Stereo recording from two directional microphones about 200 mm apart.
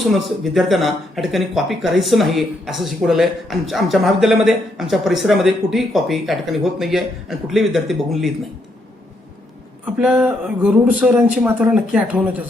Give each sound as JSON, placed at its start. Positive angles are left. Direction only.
{"t": 0.5, "sound": "speech", "side_deg": 0}
{"t": 9.8, "sound": "speech", "side_deg": -5}